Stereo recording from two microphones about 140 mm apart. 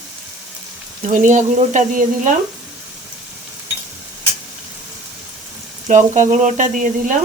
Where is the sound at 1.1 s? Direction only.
65° right (ahead or behind).